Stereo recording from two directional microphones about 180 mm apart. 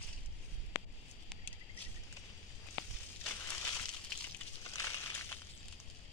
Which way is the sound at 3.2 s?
10° left (ahead or behind).